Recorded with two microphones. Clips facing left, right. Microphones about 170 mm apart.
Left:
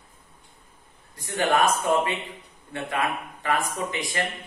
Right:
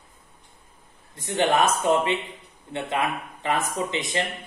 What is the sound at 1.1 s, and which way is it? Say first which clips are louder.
Speech: right 2 dB; 25° right (ahead or behind).